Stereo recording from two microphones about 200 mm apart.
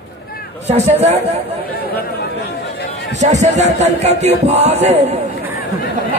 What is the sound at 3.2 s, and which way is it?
Speech, 35° right (ahead or behind).